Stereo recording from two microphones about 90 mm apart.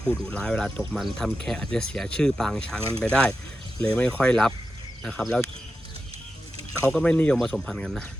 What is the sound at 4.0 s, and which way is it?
Speech, 10° left (ahead or behind).